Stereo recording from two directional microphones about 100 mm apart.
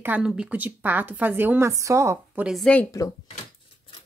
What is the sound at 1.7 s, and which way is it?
Speech, 30° right (ahead or behind).